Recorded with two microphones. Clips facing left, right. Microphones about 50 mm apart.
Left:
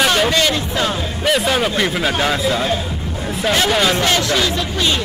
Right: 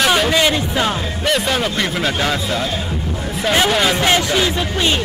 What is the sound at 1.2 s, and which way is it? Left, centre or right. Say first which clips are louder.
A man's voice: left 2 dB; centre.